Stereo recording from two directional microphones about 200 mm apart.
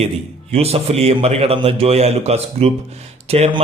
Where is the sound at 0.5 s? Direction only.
30° right (ahead or behind).